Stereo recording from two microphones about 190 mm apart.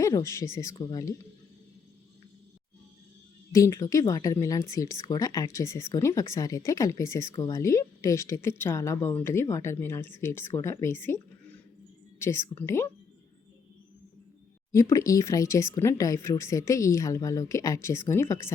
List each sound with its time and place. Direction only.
0.0 s speech: 15° left (ahead or behind)
3.5 s speech: 15° left (ahead or behind)
12.2 s speech: 15° left (ahead or behind)
14.7 s speech: 15° left (ahead or behind)